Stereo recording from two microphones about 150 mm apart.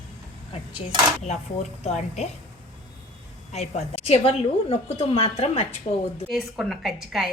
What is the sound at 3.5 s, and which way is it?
A woman's voice, 45° left (ahead or behind).